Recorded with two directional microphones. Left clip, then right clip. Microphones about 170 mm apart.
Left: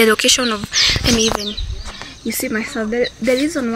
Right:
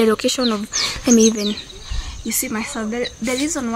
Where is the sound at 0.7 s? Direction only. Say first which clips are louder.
Left 4 dB; 50° right (ahead or behind).